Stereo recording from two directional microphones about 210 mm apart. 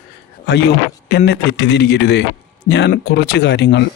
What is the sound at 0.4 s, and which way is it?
Speech, 50° left (ahead or behind).